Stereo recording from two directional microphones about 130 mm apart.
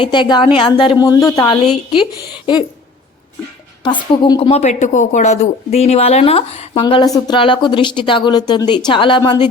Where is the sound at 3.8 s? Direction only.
35° left (ahead or behind).